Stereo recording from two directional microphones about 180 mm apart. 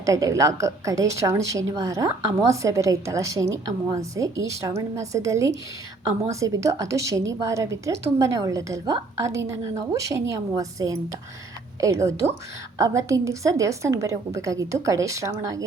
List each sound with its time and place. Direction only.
0.0 s a woman's voice: 15° right (ahead or behind)